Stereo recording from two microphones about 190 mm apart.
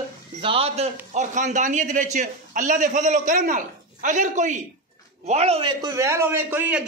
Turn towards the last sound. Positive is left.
turn(degrees=-10)  # may be behind; listen again after turning